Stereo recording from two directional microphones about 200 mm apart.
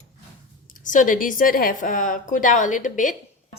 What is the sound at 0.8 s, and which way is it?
A woman's voice, 40° left (ahead or behind).